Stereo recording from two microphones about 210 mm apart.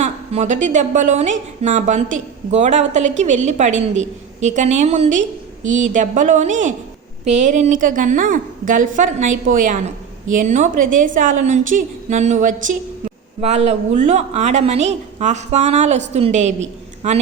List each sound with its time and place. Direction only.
0.0 s a woman's voice: 35° right (ahead or behind)